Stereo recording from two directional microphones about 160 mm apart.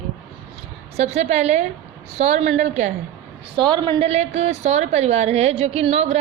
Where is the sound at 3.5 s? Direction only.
30° right (ahead or behind).